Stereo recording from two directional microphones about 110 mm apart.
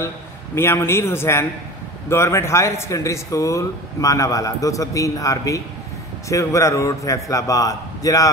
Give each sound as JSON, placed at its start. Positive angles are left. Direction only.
{"t": 0.6, "sound": "a man's voice", "side_deg": 25}